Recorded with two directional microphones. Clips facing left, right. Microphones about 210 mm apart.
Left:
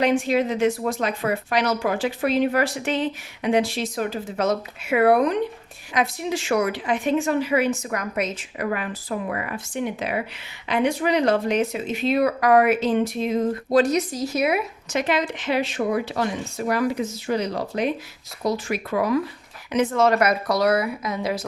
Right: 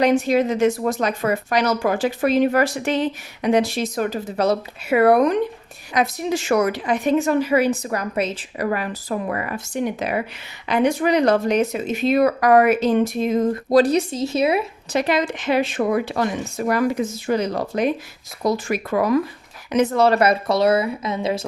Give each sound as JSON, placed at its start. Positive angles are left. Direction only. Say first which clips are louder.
{"t": 0.0, "sound": "a woman's voice", "louder": "right 3 dB", "side_deg": -40}